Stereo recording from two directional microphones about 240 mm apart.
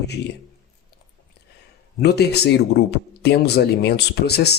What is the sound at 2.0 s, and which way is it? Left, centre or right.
Speech, left.